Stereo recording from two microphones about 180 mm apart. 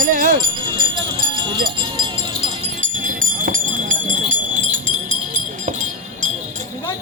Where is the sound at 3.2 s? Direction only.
50° right (ahead or behind).